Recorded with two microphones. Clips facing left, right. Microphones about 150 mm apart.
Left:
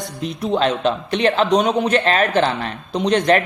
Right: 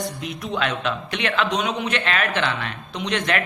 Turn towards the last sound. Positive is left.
turn(degrees=35)  # may be behind; listen again after turning